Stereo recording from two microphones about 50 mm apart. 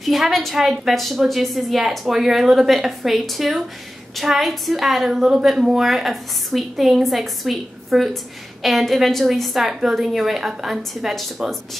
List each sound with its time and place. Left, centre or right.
0.0 s a woman's voice: centre